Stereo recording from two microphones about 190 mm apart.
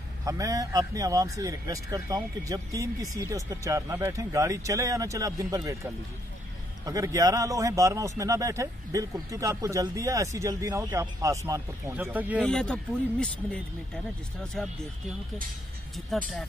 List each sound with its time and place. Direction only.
0.2 s a man's voice: 15° right (ahead or behind)
12.4 s speech: 5° left (ahead or behind)
16.1 s speech: centre (ahead or behind)